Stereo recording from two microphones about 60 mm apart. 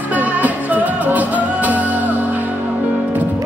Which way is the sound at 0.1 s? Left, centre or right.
Right.